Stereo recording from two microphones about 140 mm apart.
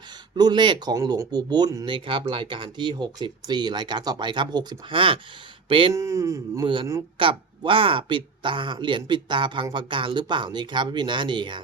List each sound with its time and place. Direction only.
0.3 s speech: 30° right (ahead or behind)
5.9 s speech: 20° right (ahead or behind)
7.2 s speech: 40° right (ahead or behind)